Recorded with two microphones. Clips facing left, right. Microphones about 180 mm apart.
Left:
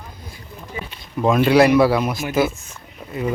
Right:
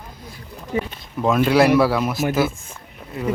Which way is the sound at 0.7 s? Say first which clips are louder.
Right 9 dB; 60° right (ahead or behind).